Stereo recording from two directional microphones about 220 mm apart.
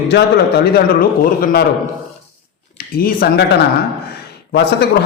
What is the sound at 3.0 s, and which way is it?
Speech, 40° left (ahead or behind).